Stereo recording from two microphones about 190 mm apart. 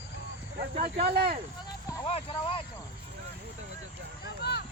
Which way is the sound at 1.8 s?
15° left (ahead or behind).